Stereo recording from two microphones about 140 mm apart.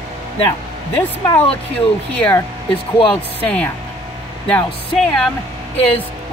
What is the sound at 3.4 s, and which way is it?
Speech, 10° left (ahead or behind).